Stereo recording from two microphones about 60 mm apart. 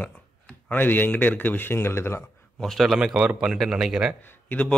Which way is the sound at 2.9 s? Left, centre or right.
Centre.